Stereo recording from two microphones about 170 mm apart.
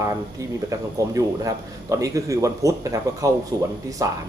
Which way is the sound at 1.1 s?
20° right (ahead or behind).